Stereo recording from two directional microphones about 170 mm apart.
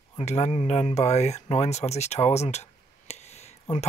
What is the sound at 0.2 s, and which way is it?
Speech, 40° left (ahead or behind).